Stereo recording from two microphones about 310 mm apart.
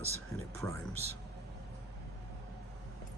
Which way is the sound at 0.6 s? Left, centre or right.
Centre.